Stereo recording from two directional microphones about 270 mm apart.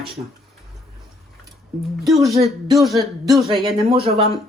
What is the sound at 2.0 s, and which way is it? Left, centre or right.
Speech, centre.